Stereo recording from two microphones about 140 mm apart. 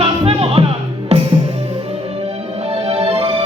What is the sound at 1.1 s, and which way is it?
Music, 50° right (ahead or behind).